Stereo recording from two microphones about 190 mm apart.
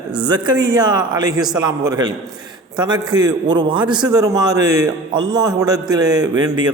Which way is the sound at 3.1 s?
20° right (ahead or behind).